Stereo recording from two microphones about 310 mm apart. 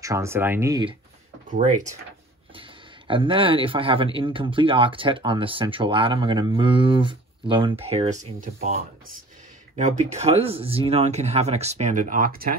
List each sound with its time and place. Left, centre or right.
0.0 s speech: centre
1.5 s speech: right
9.8 s speech: right